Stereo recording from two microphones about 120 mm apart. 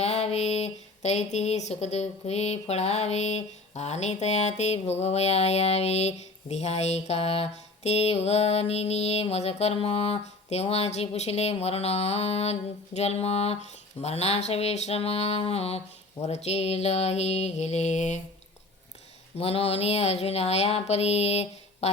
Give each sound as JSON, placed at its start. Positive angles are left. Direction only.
{"t": 0.0, "sound": "speech", "side_deg": 60}
{"t": 19.4, "sound": "speech", "side_deg": 55}